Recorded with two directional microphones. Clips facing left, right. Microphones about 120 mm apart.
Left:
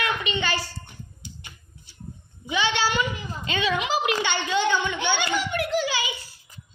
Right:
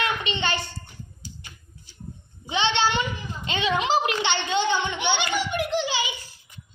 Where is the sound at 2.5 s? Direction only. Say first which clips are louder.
Right 1 dB; 25° right (ahead or behind).